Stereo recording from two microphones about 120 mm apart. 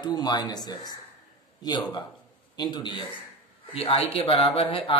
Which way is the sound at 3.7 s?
55° left (ahead or behind).